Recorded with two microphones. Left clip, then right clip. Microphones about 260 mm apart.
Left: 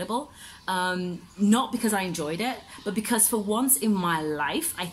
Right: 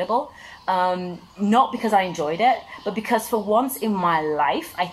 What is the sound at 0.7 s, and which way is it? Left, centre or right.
Speech, right.